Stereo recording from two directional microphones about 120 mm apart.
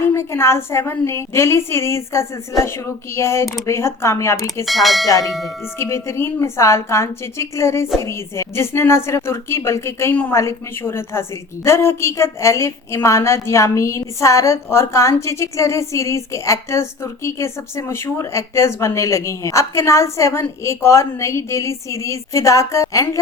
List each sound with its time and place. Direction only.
0.0 s a woman's voice: 20° left (ahead or behind)
4.6 s speech: centre (ahead or behind)
5.0 s a woman's voice: 30° left (ahead or behind)